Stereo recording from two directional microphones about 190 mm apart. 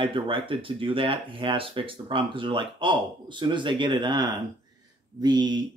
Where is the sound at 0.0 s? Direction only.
25° right (ahead or behind).